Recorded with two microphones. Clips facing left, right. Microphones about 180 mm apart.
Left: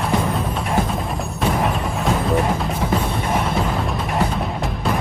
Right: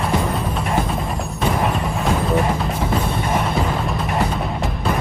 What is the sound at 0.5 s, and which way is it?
Music, centre (ahead or behind).